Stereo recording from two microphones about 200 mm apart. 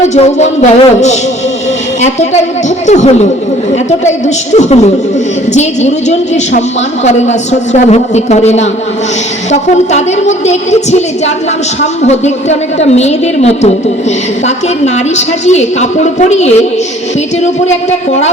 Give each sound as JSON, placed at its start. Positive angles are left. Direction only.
{"t": 0.0, "sound": "a woman's voice", "side_deg": 35}
{"t": 4.5, "sound": "a woman's voice", "side_deg": 35}